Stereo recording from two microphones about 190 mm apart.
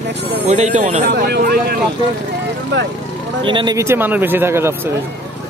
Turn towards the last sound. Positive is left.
turn(degrees=-15)  # may be behind; listen again after turning